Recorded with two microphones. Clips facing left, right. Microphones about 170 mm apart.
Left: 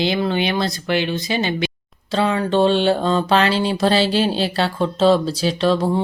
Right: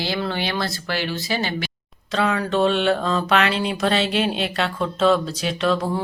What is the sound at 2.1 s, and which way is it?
Mantra, 30° left (ahead or behind).